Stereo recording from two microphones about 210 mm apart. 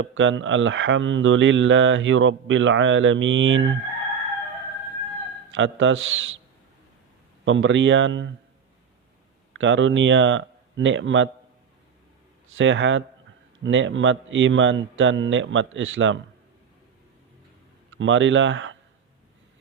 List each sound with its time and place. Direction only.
0.0 s speech: 65° right (ahead or behind)
5.5 s speech: 65° right (ahead or behind)
7.4 s speech: 65° right (ahead or behind)
9.5 s speech: 65° right (ahead or behind)
12.5 s speech: 60° right (ahead or behind)
17.9 s speech: 65° right (ahead or behind)